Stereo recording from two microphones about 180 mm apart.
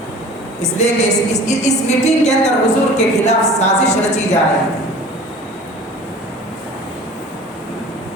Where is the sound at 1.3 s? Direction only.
40° left (ahead or behind).